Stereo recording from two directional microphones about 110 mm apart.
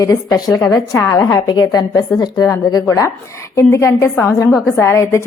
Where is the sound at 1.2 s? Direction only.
35° left (ahead or behind).